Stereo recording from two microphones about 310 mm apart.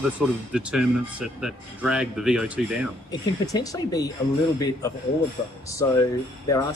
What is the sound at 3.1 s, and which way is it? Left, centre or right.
Speech, centre.